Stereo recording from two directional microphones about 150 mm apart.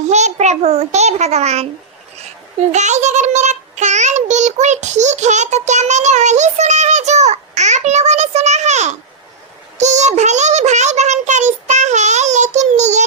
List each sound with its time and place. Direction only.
0.1 s child singing: 50° right (ahead or behind)
2.7 s child singing: 50° right (ahead or behind)
9.7 s a sound: 50° right (ahead or behind)